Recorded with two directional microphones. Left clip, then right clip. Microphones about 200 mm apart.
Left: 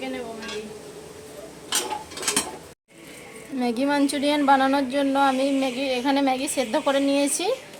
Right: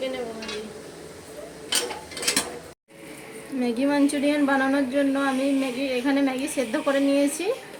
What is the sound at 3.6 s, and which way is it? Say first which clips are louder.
Speech: even; 40° left (ahead or behind).